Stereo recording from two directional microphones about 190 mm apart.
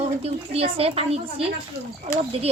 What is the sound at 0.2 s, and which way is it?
Speech, 30° right (ahead or behind).